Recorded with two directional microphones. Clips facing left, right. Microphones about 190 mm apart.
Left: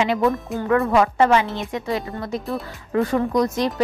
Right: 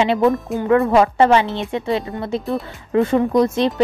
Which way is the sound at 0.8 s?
30° right (ahead or behind).